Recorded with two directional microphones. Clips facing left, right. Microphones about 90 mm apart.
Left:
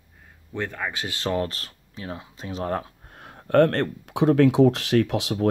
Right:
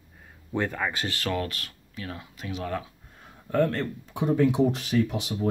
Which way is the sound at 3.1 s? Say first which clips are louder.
Left 9 dB; 65° left (ahead or behind).